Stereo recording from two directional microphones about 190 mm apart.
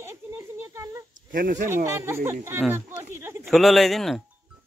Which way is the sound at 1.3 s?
45° right (ahead or behind).